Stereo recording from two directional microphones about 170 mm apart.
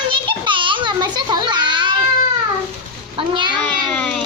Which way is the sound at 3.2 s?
30° right (ahead or behind).